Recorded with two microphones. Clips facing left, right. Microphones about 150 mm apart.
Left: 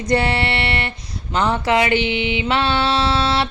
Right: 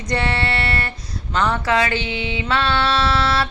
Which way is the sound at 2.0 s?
30° right (ahead or behind).